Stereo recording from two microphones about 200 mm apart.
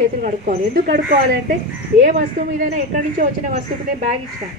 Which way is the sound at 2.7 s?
40° right (ahead or behind).